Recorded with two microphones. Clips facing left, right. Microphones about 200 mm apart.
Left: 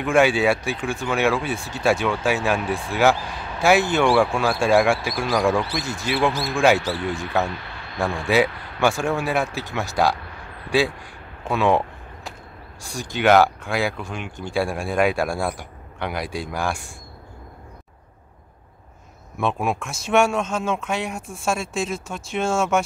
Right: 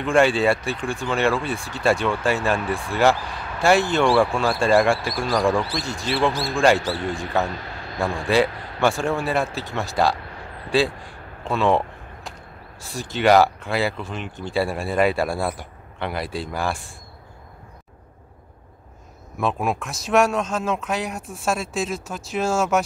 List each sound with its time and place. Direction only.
0.0 s speech: centre (ahead or behind)
11.4 s a sound: 5° left (ahead or behind)
12.8 s speech: centre (ahead or behind)
19.3 s speech: centre (ahead or behind)